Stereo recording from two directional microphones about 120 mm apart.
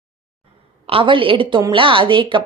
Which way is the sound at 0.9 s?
45° right (ahead or behind).